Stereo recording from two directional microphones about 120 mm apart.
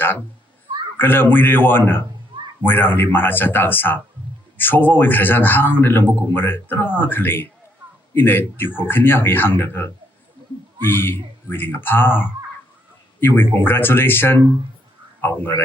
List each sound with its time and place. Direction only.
0.9 s a man's voice: 15° left (ahead or behind)